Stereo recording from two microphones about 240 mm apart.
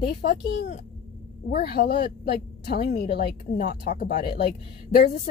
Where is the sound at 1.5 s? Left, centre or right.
Left.